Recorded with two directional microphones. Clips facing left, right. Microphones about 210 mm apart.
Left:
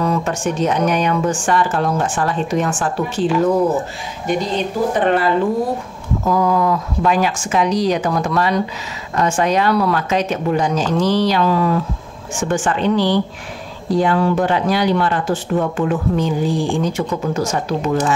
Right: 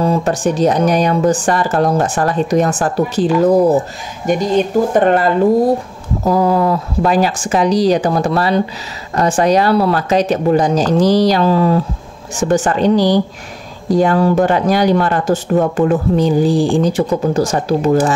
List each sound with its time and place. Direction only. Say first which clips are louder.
0.0 s speech: right 4 dB; 35° right (ahead or behind)
6.2 s speech: right 3 dB; 35° right (ahead or behind)